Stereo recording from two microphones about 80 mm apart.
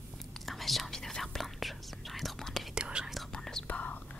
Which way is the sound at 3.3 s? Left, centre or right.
Centre.